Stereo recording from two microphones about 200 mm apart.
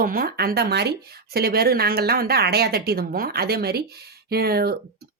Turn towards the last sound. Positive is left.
turn(degrees=-50)  # may be behind; listen again after turning